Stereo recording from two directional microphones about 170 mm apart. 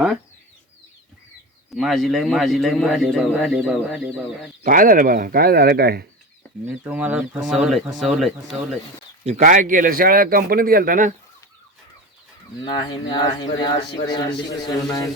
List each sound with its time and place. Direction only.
1.7 s a man's voice: centre (ahead or behind)
4.6 s speech: 55° right (ahead or behind)
6.8 s a man's voice: 10° right (ahead or behind)
9.2 s speech: 45° right (ahead or behind)
12.7 s speech: 25° left (ahead or behind)